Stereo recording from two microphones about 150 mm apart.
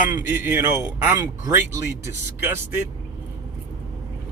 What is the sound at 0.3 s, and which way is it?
Speech, 10° right (ahead or behind).